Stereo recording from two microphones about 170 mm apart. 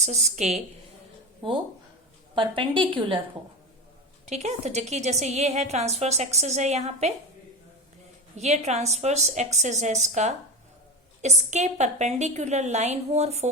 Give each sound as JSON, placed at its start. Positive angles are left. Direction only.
{"t": 0.0, "sound": "a woman's voice", "side_deg": -40}
{"t": 1.4, "sound": "a woman's voice", "side_deg": -30}
{"t": 4.3, "sound": "a woman's voice", "side_deg": -40}
{"t": 8.4, "sound": "a woman's voice", "side_deg": -40}